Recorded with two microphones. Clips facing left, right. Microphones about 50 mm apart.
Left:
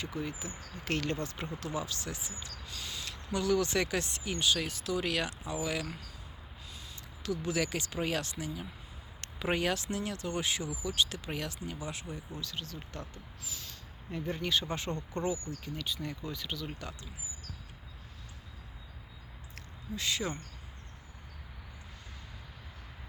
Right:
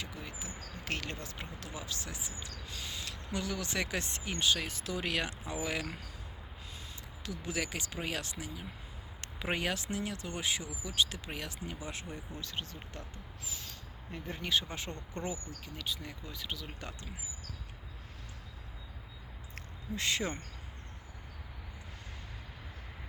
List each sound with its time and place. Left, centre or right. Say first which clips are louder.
0.0 s speech: left 6 dB; centre
2.6 s a sound: left 1 dB; centre
3.3 s speech: left 7 dB; centre
7.2 s speech: left 5 dB; centre
14.1 s speech: left 2 dB; centre
20.0 s speech: right 1 dB; right